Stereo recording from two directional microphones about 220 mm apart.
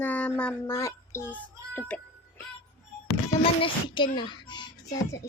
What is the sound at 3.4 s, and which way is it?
Child singing, 25° left (ahead or behind).